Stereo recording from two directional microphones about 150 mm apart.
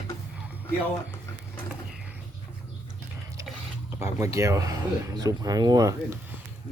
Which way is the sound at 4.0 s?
20° right (ahead or behind).